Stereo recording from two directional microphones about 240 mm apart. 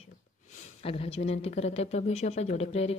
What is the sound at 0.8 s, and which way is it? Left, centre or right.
Speech, left.